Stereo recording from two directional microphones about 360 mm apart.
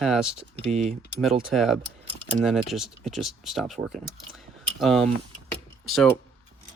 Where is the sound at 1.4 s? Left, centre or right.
Centre.